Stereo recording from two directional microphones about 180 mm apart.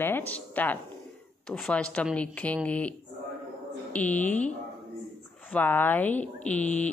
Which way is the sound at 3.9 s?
10° left (ahead or behind).